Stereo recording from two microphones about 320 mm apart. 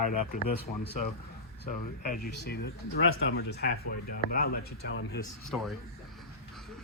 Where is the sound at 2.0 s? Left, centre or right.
Left.